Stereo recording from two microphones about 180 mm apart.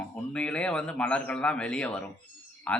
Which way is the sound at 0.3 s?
5° left (ahead or behind).